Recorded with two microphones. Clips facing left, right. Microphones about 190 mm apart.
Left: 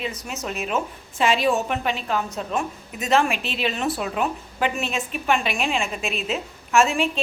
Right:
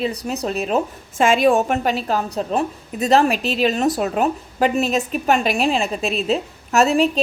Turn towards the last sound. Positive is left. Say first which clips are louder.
# right 4 dB
turn(degrees=-35)  # may be behind; listen again after turning